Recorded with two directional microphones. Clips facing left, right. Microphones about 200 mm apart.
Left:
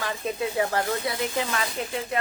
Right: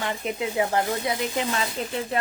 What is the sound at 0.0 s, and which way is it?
Speech, 20° right (ahead or behind).